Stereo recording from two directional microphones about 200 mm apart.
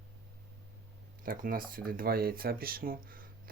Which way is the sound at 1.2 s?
45° right (ahead or behind).